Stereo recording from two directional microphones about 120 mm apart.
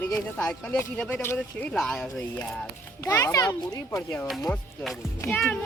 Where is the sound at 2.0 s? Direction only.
15° left (ahead or behind).